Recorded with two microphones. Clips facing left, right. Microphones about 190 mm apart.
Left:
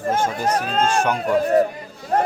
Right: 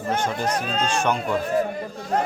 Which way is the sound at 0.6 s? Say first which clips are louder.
Left 4 dB; 50° left (ahead or behind).